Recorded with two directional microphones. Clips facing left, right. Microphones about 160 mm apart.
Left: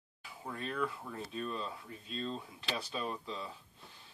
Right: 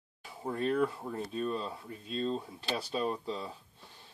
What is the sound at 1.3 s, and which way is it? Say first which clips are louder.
Speech: right 4 dB; 35° right (ahead or behind).